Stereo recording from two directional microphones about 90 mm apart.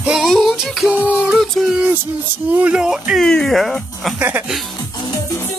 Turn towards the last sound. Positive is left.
turn(degrees=-20)  # may be behind; listen again after turning